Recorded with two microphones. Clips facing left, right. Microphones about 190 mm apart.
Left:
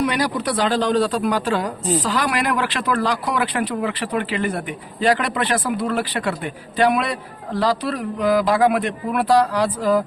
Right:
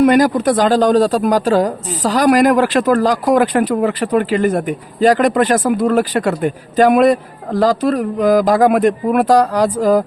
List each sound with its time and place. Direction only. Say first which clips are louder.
0.0 s speech: right 10 dB; 50° right (ahead or behind)